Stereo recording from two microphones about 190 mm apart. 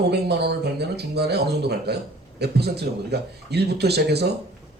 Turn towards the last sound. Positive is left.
turn(degrees=-60)  # may be behind; listen again after turning